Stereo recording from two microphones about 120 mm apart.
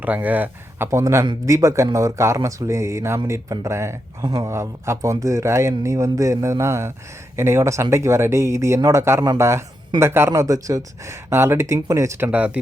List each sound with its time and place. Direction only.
0.0 s speech: 15° right (ahead or behind)